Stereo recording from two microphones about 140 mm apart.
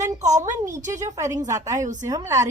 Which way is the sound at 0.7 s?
60° right (ahead or behind).